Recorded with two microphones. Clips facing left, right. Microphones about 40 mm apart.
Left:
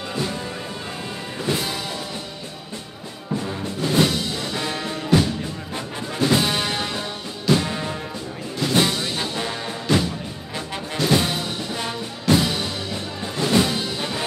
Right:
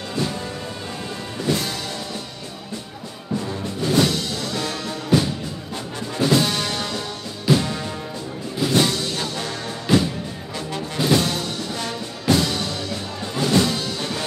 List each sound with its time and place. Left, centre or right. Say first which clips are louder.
0.1 s music: right 2 dB; centre
3.3 s music: right 1 dB; centre